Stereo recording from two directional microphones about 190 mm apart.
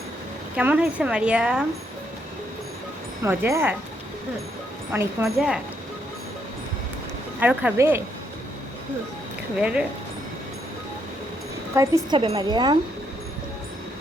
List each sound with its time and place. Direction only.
0.5 s a woman's voice: 5° right (ahead or behind)
3.2 s a woman's voice: 15° right (ahead or behind)
4.9 s speech: 10° right (ahead or behind)
7.3 s a woman's voice: 10° right (ahead or behind)
9.6 s speech: 5° right (ahead or behind)
11.8 s a woman's voice: 15° right (ahead or behind)
12.1 s speech: 30° right (ahead or behind)